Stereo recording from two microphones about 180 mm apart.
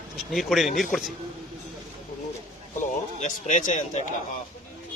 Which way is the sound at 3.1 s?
40° left (ahead or behind).